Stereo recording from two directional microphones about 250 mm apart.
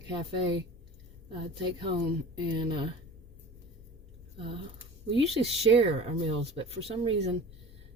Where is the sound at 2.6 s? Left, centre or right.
Centre.